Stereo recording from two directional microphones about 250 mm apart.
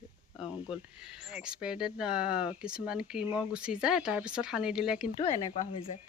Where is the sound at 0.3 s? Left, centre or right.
Centre.